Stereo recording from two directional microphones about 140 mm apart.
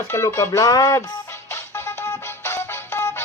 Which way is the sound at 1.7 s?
20° left (ahead or behind).